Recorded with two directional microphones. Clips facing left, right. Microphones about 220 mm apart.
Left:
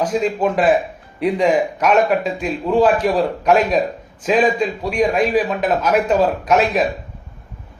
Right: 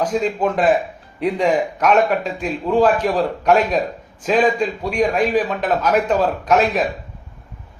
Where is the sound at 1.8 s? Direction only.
5° left (ahead or behind).